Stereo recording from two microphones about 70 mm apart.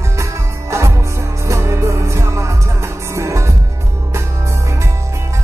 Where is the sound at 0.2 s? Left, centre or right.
Right.